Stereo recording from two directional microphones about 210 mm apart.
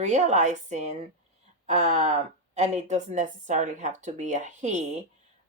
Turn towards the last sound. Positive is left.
turn(degrees=-35)  # may be behind; listen again after turning